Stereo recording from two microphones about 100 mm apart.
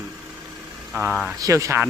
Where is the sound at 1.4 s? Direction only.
35° right (ahead or behind).